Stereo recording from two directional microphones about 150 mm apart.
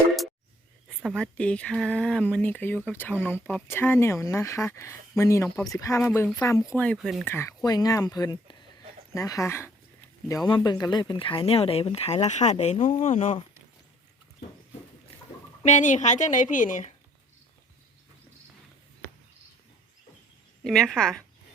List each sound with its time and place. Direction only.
0.9 s speech: 5° left (ahead or behind); by 6.7 s 25° left (ahead or behind)
6.7 s speech: 5° left (ahead or behind)
7.3 s speech: 20° left (ahead or behind); by 12.7 s 50° left (ahead or behind)
12.7 s speech: 35° left (ahead or behind)
13.1 s speech: 55° left (ahead or behind)
15.6 s speech: 55° left (ahead or behind)
20.7 s speech: centre (ahead or behind)